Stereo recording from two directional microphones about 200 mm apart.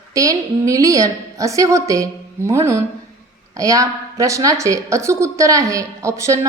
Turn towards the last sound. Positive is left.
turn(degrees=-15)  # may be behind; listen again after turning